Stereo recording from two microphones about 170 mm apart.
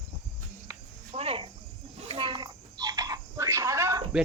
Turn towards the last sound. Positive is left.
turn(degrees=-15)  # may be behind; listen again after turning